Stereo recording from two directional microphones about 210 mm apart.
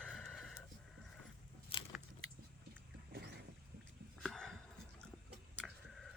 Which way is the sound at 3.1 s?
50° right (ahead or behind).